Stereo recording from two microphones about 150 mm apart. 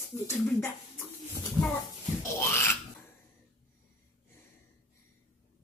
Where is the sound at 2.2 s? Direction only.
15° left (ahead or behind).